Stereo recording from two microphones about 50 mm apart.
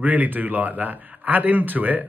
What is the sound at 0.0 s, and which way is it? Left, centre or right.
Speech, right.